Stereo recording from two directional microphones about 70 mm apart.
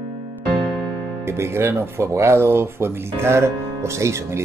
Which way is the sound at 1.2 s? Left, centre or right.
Right.